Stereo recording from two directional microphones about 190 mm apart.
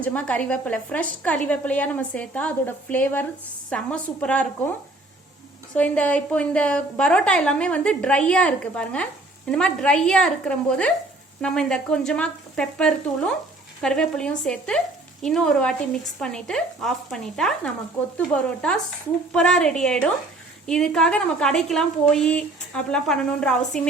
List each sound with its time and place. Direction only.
0.0 s a woman's voice: 5° left (ahead or behind)
5.7 s a woman's voice: 5° left (ahead or behind)
19.3 s a woman's voice: 5° left (ahead or behind)